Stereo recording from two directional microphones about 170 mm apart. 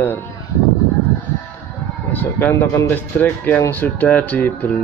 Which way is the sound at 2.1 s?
10° left (ahead or behind).